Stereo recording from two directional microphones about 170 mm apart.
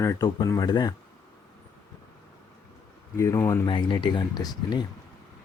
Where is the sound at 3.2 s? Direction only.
15° left (ahead or behind).